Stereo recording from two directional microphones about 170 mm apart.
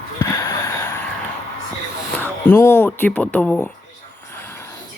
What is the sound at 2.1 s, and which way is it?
Speech, 10° left (ahead or behind).